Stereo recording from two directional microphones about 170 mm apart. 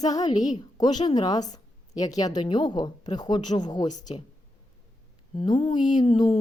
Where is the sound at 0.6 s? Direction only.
25° left (ahead or behind).